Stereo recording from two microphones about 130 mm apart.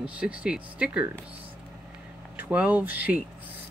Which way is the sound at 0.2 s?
10° right (ahead or behind).